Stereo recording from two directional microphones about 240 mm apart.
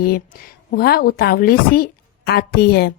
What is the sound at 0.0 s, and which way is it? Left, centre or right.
Speech, left.